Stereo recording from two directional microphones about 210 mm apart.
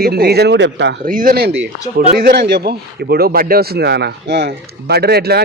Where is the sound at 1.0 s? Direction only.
40° right (ahead or behind).